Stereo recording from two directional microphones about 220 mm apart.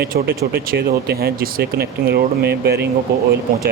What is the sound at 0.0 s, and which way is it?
Speech, 45° right (ahead or behind).